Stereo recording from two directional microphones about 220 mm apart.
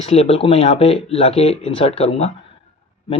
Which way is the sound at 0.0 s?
30° left (ahead or behind).